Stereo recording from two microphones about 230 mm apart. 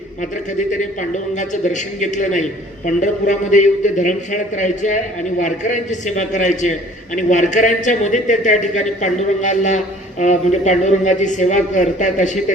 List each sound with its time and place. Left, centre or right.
1.4 s a man's voice: left